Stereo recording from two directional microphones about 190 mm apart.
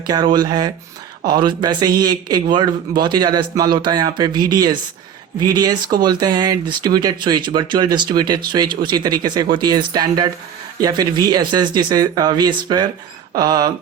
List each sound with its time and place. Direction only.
0.1 s speech: 20° right (ahead or behind)